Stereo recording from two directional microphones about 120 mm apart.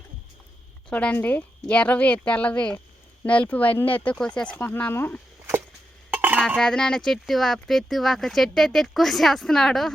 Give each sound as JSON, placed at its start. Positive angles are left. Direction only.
{"t": 0.9, "sound": "a woman's voice", "side_deg": 10}
{"t": 6.1, "sound": "dishes", "side_deg": -15}
{"t": 6.6, "sound": "speech", "side_deg": 5}